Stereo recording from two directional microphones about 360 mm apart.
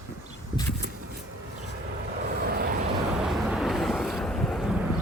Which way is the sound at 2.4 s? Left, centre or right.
Right.